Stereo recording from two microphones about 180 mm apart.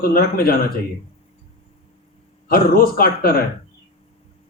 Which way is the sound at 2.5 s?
55° left (ahead or behind).